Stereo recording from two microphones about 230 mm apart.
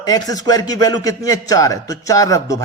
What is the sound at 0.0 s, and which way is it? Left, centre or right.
A man's voice, centre.